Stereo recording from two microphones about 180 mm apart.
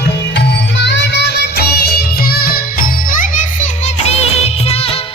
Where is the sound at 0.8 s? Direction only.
75° left (ahead or behind); by 5.0 s 30° left (ahead or behind).